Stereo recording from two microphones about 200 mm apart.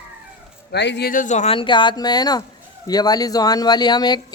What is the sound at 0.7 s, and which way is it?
Speech, 60° left (ahead or behind).